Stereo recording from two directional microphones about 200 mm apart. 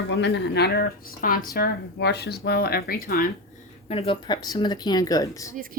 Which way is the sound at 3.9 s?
25° left (ahead or behind).